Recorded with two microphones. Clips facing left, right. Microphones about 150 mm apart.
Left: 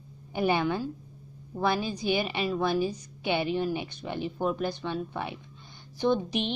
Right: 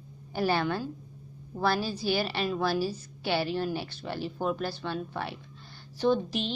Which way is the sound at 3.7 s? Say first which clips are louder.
Left 1 dB; 15° left (ahead or behind).